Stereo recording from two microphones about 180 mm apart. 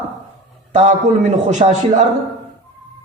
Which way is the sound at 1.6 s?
35° right (ahead or behind).